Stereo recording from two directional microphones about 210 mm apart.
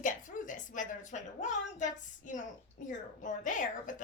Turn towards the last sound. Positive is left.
turn(degrees=40)  # may be behind; listen again after turning